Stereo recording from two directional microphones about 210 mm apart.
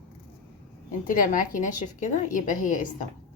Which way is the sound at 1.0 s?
40° left (ahead or behind).